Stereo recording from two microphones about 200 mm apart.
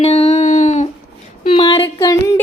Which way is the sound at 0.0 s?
30° left (ahead or behind).